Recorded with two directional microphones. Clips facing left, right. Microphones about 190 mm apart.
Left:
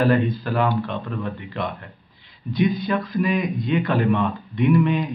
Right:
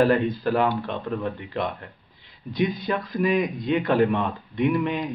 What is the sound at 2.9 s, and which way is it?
Speech, 35° right (ahead or behind).